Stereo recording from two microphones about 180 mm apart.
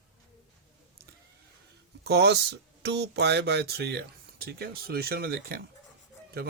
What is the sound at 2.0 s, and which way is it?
Speech, 70° right (ahead or behind).